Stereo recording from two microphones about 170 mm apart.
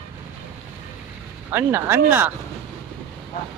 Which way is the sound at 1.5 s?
15° right (ahead or behind).